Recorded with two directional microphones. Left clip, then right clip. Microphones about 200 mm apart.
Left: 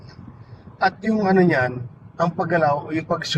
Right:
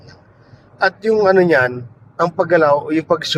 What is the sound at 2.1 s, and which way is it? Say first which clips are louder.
A man's voice: right 6 dB; 60° right (ahead or behind).